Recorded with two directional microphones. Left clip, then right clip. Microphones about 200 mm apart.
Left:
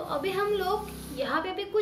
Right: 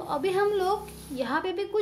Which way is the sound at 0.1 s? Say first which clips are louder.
Right 3 dB; 55° right (ahead or behind).